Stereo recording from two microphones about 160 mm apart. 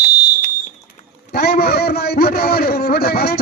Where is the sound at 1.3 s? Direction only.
80° left.